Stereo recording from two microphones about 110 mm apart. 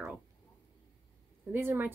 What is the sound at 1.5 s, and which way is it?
Speech, 20° right (ahead or behind).